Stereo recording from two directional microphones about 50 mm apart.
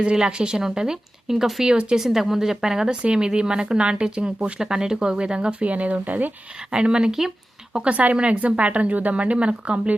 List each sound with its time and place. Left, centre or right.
0.0 s speech: centre
1.7 s speech: right
2.0 s speech: centre; by 6.3 s right
6.7 s speech: centre